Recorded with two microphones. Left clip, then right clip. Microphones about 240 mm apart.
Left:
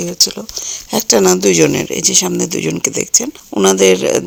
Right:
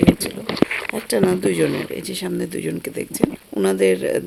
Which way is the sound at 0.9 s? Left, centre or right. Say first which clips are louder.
Left 10 dB; left.